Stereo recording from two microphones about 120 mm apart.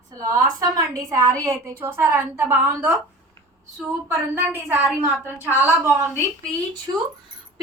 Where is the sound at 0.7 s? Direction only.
25° right (ahead or behind).